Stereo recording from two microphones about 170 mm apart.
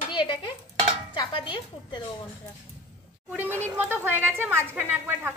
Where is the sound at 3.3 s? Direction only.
10° right (ahead or behind).